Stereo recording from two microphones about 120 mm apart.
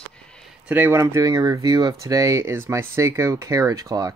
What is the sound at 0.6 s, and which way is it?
Speech, 15° right (ahead or behind).